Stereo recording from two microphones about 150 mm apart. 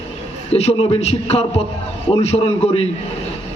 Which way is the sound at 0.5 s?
45° left (ahead or behind).